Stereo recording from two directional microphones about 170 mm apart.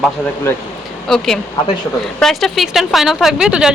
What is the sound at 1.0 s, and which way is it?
A woman's voice, centre (ahead or behind).